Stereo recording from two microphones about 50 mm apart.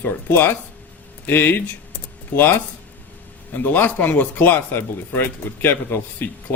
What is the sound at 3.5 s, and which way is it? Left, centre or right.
Speech, left.